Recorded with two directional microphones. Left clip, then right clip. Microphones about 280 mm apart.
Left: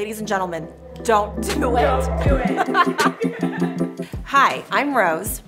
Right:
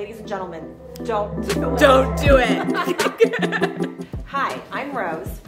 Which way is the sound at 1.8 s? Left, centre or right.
Right.